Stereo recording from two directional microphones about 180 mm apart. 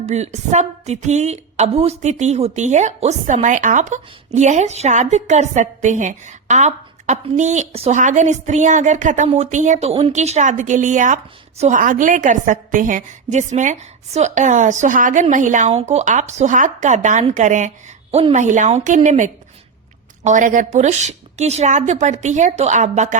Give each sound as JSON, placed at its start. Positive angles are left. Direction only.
{"t": 0.0, "sound": "a woman's voice", "side_deg": -40}